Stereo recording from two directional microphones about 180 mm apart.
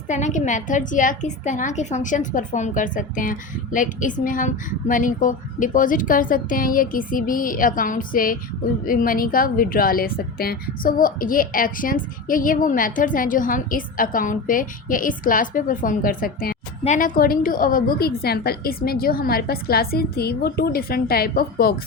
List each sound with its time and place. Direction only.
0.1 s a woman's voice: 40° left (ahead or behind); by 21.8 s 55° left (ahead or behind)